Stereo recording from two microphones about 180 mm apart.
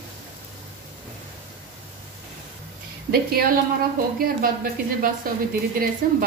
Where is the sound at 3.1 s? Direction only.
60° right (ahead or behind).